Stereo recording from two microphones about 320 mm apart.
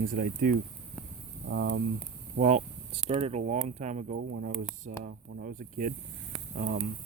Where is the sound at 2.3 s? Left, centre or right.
Right.